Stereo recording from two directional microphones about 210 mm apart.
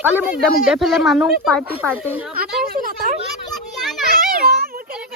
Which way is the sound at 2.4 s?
45° right (ahead or behind).